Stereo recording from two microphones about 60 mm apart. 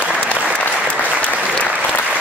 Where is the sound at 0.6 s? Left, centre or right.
Left.